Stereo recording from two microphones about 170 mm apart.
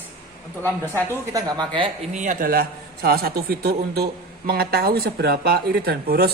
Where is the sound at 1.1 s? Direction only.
20° right (ahead or behind).